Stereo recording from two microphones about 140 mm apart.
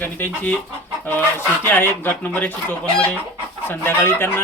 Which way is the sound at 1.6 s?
15° left (ahead or behind).